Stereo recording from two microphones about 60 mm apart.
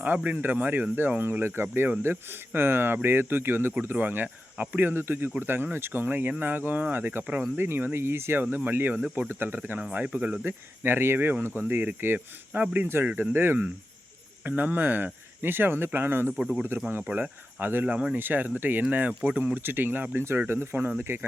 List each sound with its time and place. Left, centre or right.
0.0 s speech: right
9.9 s speech: right
10.4 s speech: right
14.4 s speech: right
17.0 s speech: right
17.8 s speech: right
18.2 s speech: right